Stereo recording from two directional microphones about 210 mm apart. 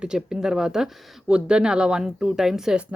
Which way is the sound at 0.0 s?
5° right (ahead or behind).